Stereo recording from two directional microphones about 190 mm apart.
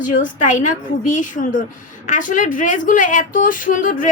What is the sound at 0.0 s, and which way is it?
A woman's voice, 45° left (ahead or behind).